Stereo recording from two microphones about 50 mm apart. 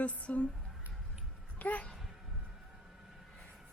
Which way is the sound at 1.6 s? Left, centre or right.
Left.